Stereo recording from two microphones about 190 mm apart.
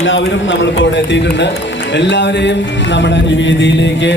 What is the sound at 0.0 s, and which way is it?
A man's voice, 85° left.